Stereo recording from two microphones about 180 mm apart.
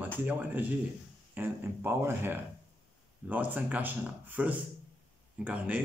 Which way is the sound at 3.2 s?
10° right (ahead or behind).